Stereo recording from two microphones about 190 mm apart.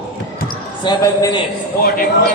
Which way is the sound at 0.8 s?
20° left (ahead or behind).